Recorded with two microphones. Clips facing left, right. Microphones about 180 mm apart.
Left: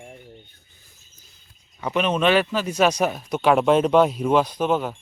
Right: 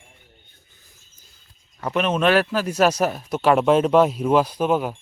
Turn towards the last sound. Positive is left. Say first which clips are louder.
# right 1 dB
turn(degrees=-5)  # may be behind; listen again after turning